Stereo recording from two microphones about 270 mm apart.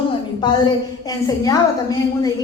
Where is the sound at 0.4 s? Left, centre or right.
Centre.